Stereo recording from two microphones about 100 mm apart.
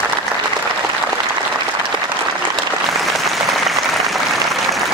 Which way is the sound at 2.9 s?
Centre (ahead or behind).